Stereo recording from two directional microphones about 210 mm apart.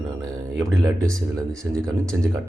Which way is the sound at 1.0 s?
5° left (ahead or behind).